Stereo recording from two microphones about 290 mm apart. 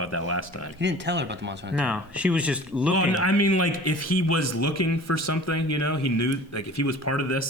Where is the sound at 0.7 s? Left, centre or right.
Right.